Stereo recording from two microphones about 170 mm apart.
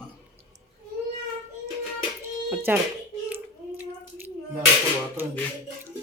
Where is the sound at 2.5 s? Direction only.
10° right (ahead or behind).